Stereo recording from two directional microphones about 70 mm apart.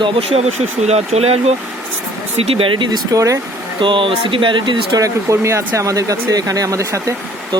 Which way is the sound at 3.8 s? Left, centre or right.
Right.